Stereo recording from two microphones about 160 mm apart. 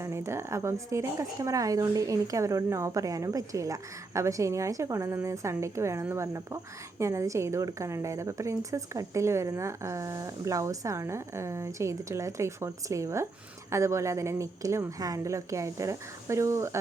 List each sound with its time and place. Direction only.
0.0 s speech: 15° right (ahead or behind)